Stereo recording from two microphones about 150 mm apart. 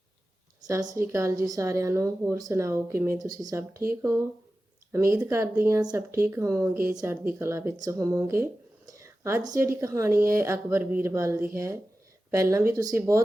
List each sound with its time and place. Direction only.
0.7 s speech: 25° right (ahead or behind)
4.9 s speech: 20° right (ahead or behind)
8.9 s whispering: 20° right (ahead or behind)
9.8 s speech: 20° right (ahead or behind)
10.1 s speech: 75° right (ahead or behind)
10.3 s speech: 20° right (ahead or behind)